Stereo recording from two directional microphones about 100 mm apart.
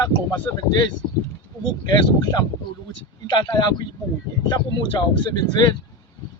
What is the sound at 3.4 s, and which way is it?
Speech, 40° left (ahead or behind).